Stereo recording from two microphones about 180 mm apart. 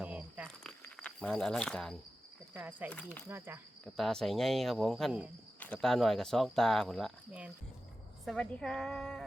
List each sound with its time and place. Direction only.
0.0 s a sound: 5° right (ahead or behind)
0.4 s insect: 5° left (ahead or behind)
2.5 s speech: 10° right (ahead or behind)
2.9 s speech: 5° left (ahead or behind)
3.2 s speech: 10° right (ahead or behind)
3.9 s speech: centre (ahead or behind)
5.5 s speech: 10° left (ahead or behind)